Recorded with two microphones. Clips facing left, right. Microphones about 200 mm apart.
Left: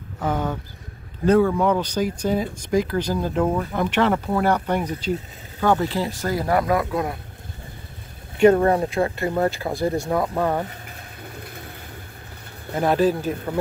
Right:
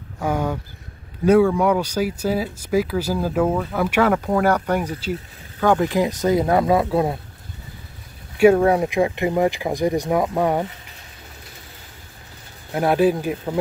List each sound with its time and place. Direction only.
0.2 s speech: 10° right (ahead or behind); by 7.2 s 25° right (ahead or behind)
8.4 s speech: 10° right (ahead or behind)
11.4 s a sound: 55° left (ahead or behind)
12.7 s speech: 10° right (ahead or behind)